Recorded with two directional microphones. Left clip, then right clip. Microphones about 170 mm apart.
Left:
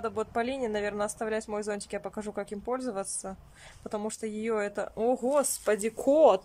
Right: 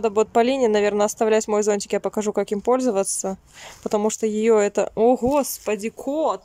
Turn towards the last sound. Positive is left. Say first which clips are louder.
# left 2 dB
turn(degrees=5)  # may be behind; listen again after turning